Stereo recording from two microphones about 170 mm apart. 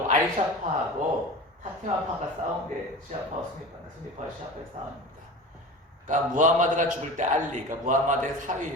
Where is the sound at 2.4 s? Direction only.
45° right (ahead or behind).